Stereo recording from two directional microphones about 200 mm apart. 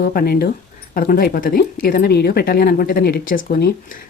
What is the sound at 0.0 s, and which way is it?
Speech, 50° left (ahead or behind).